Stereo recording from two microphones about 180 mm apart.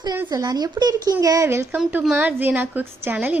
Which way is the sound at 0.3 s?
20° right (ahead or behind).